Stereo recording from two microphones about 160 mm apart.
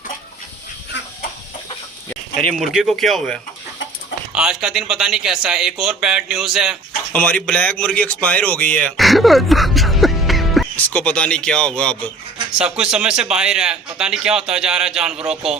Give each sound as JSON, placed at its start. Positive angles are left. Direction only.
{"t": 2.4, "sound": "a man's voice", "side_deg": 0}
{"t": 7.1, "sound": "speech", "side_deg": 10}
{"t": 12.5, "sound": "a man's voice", "side_deg": -5}